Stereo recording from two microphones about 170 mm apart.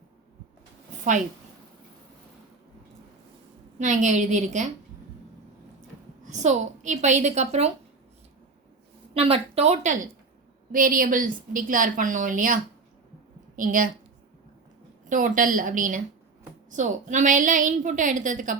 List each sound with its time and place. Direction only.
3.8 s a woman's voice: 45° right (ahead or behind)
6.2 s a woman's voice: 45° right (ahead or behind)
9.1 s a woman's voice: 35° right (ahead or behind); by 12.5 s 50° right (ahead or behind)
13.6 s a woman's voice: 50° right (ahead or behind)
15.1 s a woman's voice: 50° right (ahead or behind)